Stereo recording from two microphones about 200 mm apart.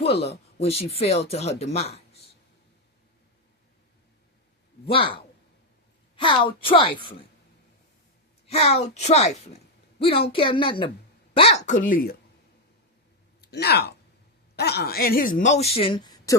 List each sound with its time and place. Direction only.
0.0 s speech: 30° left (ahead or behind)
4.9 s a woman's voice: 25° left (ahead or behind)
8.4 s a woman's voice: 30° left (ahead or behind)
13.4 s speech: 55° left (ahead or behind); by 16.4 s 20° left (ahead or behind)